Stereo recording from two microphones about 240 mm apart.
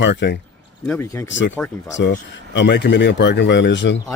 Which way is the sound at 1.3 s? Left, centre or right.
Left.